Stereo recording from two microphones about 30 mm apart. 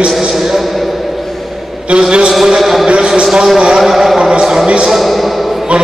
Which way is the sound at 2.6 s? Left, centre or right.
Centre.